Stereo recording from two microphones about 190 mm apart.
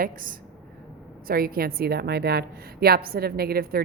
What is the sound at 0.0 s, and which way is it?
A woman's voice, 45° right (ahead or behind).